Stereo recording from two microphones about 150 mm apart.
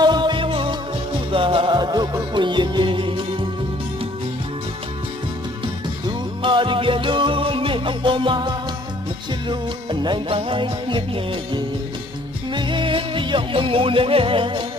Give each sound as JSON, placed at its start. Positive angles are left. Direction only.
{"t": 0.0, "sound": "music", "side_deg": -30}
{"t": 6.1, "sound": "music", "side_deg": -35}